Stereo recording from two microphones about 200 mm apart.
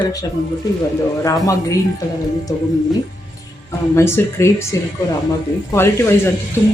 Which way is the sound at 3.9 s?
15° left (ahead or behind).